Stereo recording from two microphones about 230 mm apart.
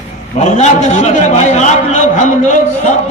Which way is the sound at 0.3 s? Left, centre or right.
Left.